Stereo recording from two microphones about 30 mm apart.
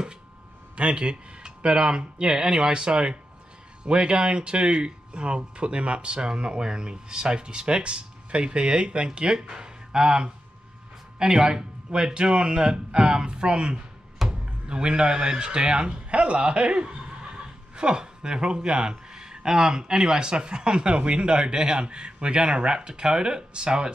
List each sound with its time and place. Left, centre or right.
0.7 s speech: right
14.2 s music: centre
14.7 s a man's voice: right